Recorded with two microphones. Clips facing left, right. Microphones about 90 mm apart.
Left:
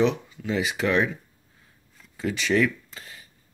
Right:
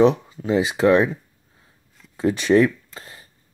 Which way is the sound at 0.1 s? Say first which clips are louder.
Right 7 dB; 30° right (ahead or behind).